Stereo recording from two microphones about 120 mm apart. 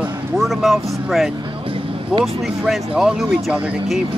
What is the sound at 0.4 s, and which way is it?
Speech, centre (ahead or behind).